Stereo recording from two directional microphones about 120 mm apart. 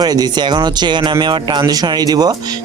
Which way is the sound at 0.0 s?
35° right (ahead or behind).